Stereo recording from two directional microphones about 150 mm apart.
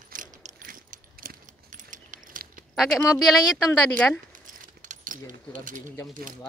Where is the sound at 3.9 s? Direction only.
5° left (ahead or behind).